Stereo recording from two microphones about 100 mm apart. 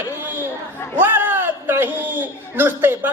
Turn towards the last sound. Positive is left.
turn(degrees=-20)  # may be behind; listen again after turning